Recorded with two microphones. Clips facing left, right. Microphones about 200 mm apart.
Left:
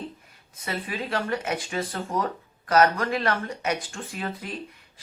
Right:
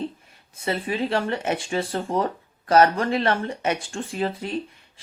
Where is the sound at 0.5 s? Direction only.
30° right (ahead or behind).